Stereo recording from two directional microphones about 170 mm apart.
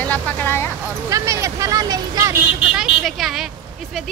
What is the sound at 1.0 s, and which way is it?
Speech, 20° right (ahead or behind).